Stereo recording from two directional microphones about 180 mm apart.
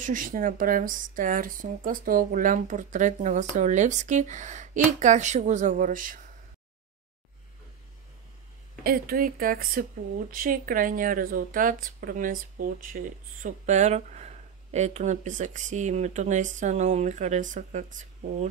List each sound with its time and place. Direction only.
0.0 s speech: 50° right (ahead or behind)
8.8 s speech: 55° right (ahead or behind)